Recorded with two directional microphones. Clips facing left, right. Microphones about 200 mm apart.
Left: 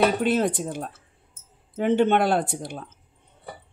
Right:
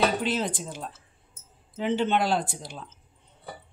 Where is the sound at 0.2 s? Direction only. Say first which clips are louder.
Left 6 dB; 60° left (ahead or behind).